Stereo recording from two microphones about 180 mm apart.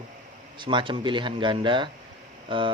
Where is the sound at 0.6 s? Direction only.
25° right (ahead or behind).